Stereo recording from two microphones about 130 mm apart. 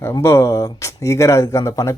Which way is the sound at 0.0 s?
20° left (ahead or behind).